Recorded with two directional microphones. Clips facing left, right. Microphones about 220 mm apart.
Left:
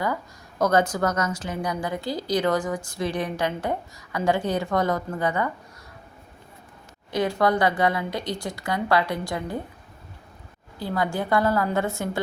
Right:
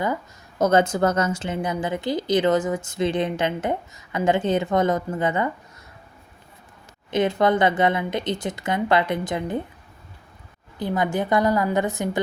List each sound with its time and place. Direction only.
0.6 s a woman's voice: 25° right (ahead or behind)
7.1 s a woman's voice: 20° right (ahead or behind)
10.8 s a woman's voice: 20° right (ahead or behind)